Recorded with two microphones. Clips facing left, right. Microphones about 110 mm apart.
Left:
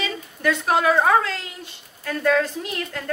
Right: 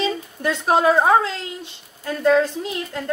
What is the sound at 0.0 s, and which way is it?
A woman's voice, 25° right (ahead or behind).